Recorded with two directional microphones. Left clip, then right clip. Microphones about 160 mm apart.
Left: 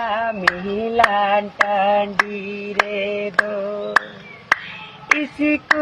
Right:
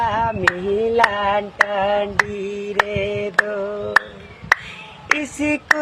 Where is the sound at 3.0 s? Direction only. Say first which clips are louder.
Even; 30° right (ahead or behind).